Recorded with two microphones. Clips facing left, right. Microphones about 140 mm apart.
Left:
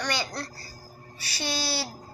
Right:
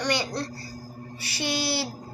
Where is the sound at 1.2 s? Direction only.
15° right (ahead or behind).